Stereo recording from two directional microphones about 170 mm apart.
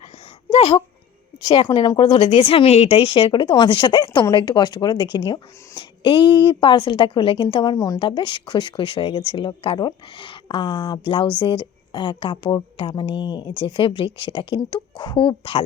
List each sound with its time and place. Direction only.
1.5 s speech: 25° left (ahead or behind)